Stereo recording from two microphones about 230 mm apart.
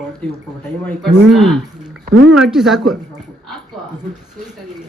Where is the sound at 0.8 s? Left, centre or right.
Centre.